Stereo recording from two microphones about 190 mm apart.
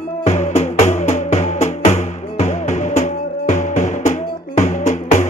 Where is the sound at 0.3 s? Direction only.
35° left (ahead or behind).